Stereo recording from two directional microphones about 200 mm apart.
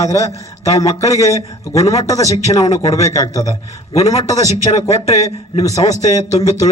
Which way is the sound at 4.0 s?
35° left (ahead or behind).